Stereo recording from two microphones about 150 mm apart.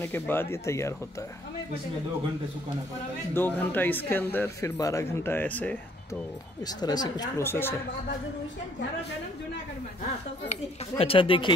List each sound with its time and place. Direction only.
0.0 s speech: 15° left (ahead or behind)
3.3 s speech: 15° left (ahead or behind)
6.6 s speech: 25° left (ahead or behind)
10.5 s speech: 40° left (ahead or behind)